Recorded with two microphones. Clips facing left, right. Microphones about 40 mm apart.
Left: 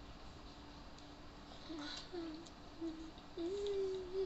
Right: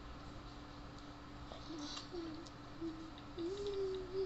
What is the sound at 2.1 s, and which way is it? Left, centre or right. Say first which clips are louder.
Speech: even; left.